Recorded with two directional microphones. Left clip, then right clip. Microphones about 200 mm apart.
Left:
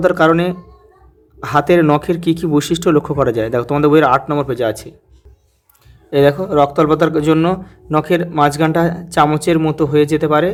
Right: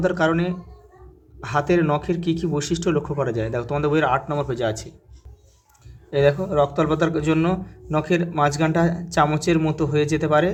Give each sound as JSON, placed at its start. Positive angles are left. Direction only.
{"t": 0.0, "sound": "speech", "side_deg": 35}
{"t": 6.1, "sound": "speech", "side_deg": 30}